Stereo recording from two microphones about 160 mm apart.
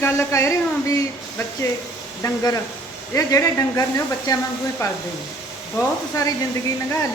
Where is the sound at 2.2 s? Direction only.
25° left (ahead or behind).